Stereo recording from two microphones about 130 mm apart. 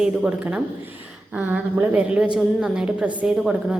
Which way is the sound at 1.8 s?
10° right (ahead or behind).